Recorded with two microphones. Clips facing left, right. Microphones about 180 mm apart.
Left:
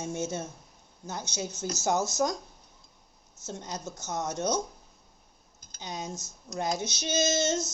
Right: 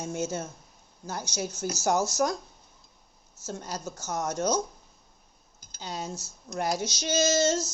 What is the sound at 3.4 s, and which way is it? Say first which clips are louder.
A woman's voice: right 2 dB; 20° left (ahead or behind).